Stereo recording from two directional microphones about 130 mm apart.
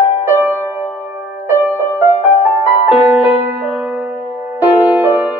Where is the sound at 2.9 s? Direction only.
10° right (ahead or behind).